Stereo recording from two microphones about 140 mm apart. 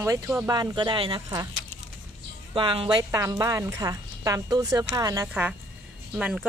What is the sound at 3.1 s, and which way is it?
Speech, 25° right (ahead or behind).